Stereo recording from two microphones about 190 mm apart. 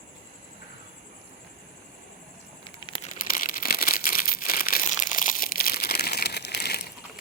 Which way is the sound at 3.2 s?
45° left (ahead or behind).